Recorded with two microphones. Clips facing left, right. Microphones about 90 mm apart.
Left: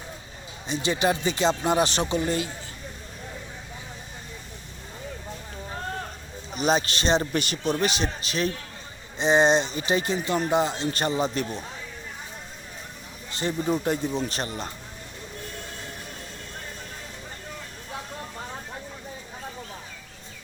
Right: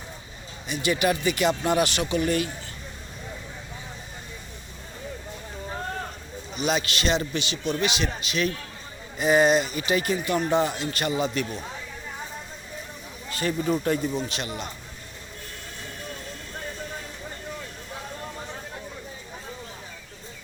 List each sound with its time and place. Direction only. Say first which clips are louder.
0.7 s speech: even; 30° left (ahead or behind)
6.7 s speech: left 2 dB; 35° left (ahead or behind)
7.3 s speech: left 2 dB; 50° left (ahead or behind); by 10.8 s 20° left (ahead or behind)
11.2 s speech: even; 35° left (ahead or behind)
13.3 s speech: right 1 dB; 25° left (ahead or behind)
14.3 s speech: left 1 dB; 40° left (ahead or behind)